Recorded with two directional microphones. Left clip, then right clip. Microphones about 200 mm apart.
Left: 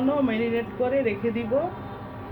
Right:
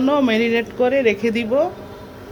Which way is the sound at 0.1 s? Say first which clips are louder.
Right 9 dB; 60° right (ahead or behind).